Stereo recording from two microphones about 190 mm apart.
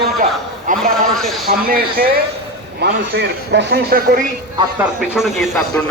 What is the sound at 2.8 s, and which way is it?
A man's voice, 60° right (ahead or behind).